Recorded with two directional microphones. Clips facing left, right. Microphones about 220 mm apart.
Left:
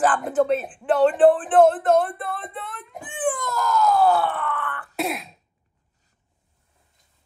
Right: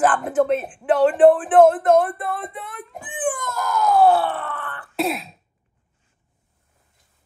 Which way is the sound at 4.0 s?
30° right (ahead or behind).